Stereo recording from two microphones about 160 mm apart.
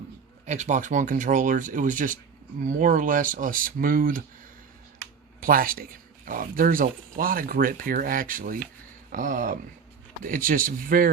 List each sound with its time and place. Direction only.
0.4 s speech: 45° right (ahead or behind)
5.4 s speech: 60° right (ahead or behind)